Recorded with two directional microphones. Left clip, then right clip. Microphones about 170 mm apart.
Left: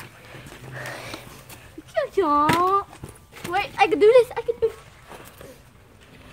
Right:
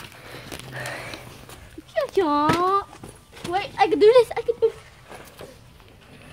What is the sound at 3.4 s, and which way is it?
Speech, centre (ahead or behind).